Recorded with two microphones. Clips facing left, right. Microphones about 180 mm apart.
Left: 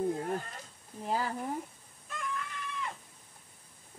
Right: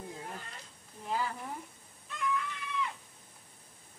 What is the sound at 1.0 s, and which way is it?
Sizzle, 40° left (ahead or behind).